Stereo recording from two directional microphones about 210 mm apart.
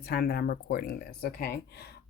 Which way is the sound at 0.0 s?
45° left (ahead or behind).